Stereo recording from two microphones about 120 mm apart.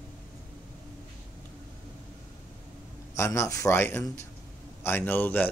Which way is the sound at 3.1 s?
25° left (ahead or behind).